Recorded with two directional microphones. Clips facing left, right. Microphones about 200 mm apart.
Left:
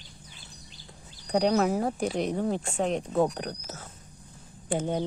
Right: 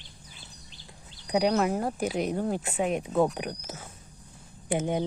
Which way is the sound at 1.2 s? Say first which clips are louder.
Left 1 dB; 5° right (ahead or behind).